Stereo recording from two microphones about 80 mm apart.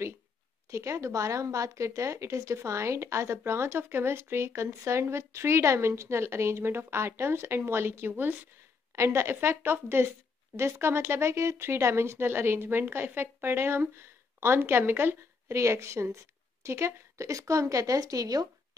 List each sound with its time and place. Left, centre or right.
0.7 s a woman's voice: right
8.9 s speech: right